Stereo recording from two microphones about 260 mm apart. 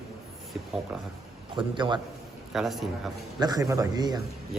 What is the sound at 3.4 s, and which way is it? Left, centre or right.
Speech, centre.